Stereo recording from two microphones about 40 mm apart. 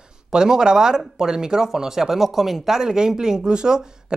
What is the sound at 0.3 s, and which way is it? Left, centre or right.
Speech, centre.